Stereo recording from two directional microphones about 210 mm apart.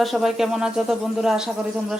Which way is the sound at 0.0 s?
Centre (ahead or behind).